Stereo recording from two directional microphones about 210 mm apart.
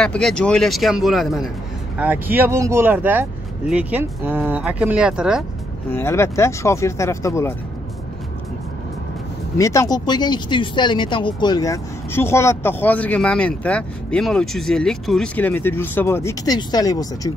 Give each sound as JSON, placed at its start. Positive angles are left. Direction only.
{"t": 0.0, "sound": "speech", "side_deg": 5}
{"t": 5.9, "sound": "speech", "side_deg": 10}
{"t": 9.6, "sound": "speech", "side_deg": 15}